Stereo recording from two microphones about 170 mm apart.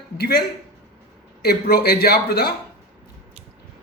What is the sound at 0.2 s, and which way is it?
A man's voice, 65° left (ahead or behind).